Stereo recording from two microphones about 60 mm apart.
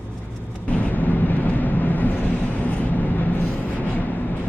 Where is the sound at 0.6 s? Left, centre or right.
Left.